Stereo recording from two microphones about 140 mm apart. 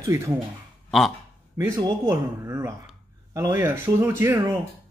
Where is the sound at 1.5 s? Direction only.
15° right (ahead or behind).